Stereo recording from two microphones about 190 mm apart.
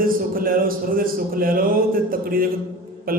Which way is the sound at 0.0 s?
50° right (ahead or behind).